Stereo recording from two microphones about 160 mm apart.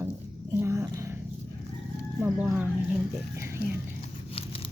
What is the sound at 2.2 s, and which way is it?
Speech, 10° right (ahead or behind).